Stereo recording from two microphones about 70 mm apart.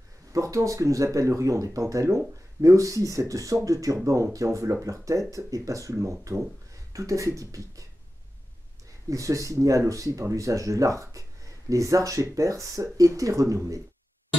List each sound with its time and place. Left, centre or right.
0.3 s speech: right
9.1 s speech: right